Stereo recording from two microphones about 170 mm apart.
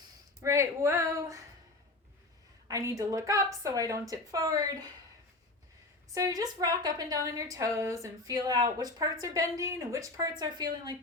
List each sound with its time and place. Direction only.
0.4 s speech: 15° right (ahead or behind)
2.6 s a woman's voice: 20° right (ahead or behind)
6.1 s a woman's voice: 20° right (ahead or behind)